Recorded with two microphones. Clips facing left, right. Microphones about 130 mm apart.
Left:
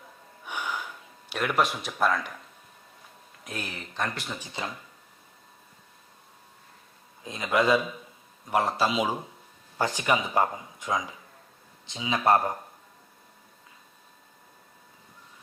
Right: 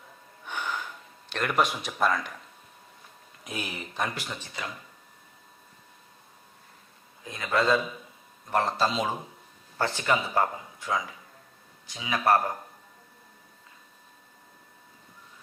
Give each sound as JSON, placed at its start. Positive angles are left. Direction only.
{"t": 0.4, "sound": "gasp", "side_deg": 10}
{"t": 1.3, "sound": "speech", "side_deg": 5}
{"t": 3.4, "sound": "speech", "side_deg": -10}
{"t": 4.6, "sound": "speech", "side_deg": 25}
{"t": 7.3, "sound": "speech", "side_deg": 20}